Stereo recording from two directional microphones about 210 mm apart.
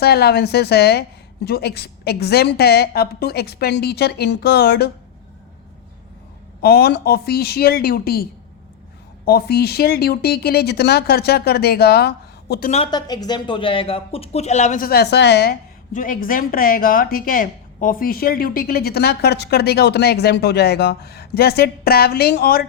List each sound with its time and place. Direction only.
0.0 s speech: 50° left (ahead or behind)
6.6 s speech: 50° left (ahead or behind)
12.7 s speech: 25° left (ahead or behind); by 22.6 s 45° left (ahead or behind)